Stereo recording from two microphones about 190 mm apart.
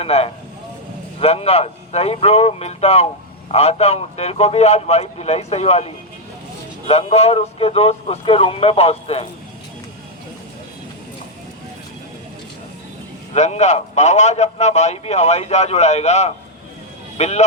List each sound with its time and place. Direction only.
0.0 s a man's voice: 30° left (ahead or behind)
13.3 s a man's voice: 35° left (ahead or behind)